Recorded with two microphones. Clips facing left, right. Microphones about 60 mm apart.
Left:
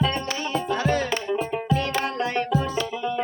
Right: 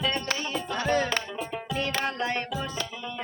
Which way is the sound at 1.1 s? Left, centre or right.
Left.